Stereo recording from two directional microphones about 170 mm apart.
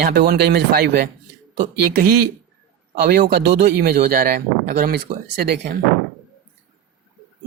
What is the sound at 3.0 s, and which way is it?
Speech, 65° right (ahead or behind).